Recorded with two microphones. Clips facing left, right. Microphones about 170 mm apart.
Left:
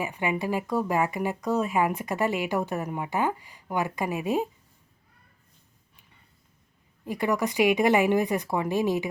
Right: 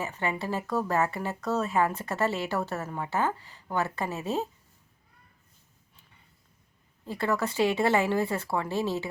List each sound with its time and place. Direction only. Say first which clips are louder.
0.0 s speech: left 3 dB; 15° left (ahead or behind)
7.0 s speech: left 2 dB; 15° left (ahead or behind)